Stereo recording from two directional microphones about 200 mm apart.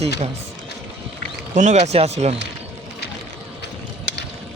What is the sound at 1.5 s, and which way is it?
Speech, 35° right (ahead or behind).